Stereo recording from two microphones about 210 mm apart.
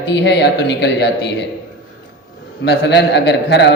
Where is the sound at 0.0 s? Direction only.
55° left (ahead or behind).